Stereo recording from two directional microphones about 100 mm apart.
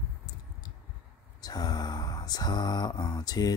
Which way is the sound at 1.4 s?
40° left (ahead or behind).